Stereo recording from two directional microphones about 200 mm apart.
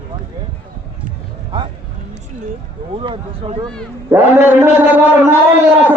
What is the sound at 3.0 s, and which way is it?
Speech, 25° right (ahead or behind).